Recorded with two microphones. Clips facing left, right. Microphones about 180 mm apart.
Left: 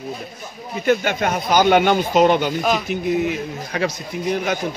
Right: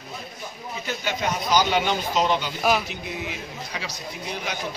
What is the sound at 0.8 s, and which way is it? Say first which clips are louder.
A man's voice: left 9 dB; 55° left (ahead or behind).